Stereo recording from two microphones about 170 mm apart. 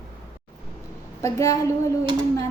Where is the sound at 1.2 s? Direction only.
20° left (ahead or behind).